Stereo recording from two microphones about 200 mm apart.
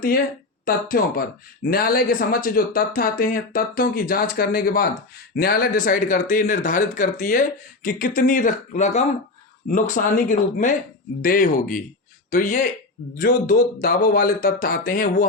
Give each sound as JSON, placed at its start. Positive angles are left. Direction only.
{"t": 0.6, "sound": "speech", "side_deg": 45}